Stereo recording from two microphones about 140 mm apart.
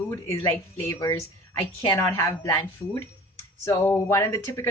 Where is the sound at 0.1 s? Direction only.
20° left (ahead or behind).